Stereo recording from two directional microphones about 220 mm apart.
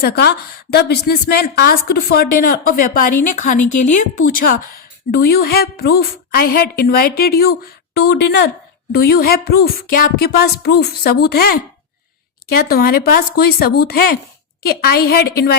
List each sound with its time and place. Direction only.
0.0 s a woman's voice: 45° left (ahead or behind)